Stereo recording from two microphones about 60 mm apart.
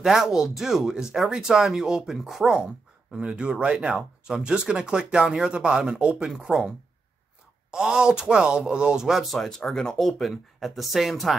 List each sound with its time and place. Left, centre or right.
0.0 s speech: centre
7.7 s speech: centre